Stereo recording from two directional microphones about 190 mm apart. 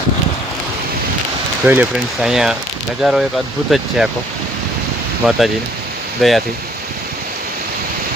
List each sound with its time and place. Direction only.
1.6 s speech: 10° right (ahead or behind)
5.2 s speech: centre (ahead or behind)